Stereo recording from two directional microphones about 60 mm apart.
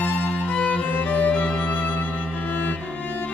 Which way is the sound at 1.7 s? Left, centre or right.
Left.